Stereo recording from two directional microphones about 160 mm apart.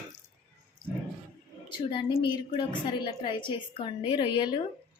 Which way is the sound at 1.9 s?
30° left (ahead or behind).